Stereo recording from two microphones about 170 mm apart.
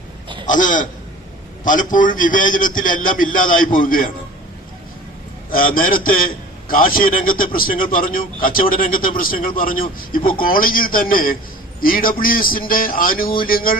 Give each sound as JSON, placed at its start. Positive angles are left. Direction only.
{"t": 0.4, "sound": "a man's voice", "side_deg": 50}
{"t": 5.5, "sound": "a man's voice", "side_deg": 55}